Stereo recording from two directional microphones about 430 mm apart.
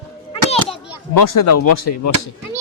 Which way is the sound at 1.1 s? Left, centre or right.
Left.